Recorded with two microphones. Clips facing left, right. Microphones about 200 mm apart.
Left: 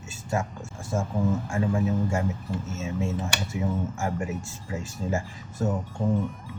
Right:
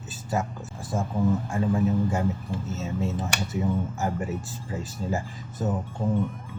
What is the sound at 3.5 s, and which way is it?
Speech, centre (ahead or behind).